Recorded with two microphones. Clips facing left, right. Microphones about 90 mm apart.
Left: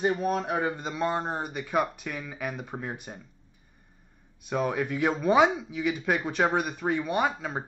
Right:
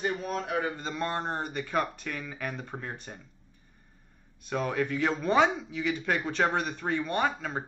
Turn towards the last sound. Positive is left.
turn(degrees=10)  # may be behind; listen again after turning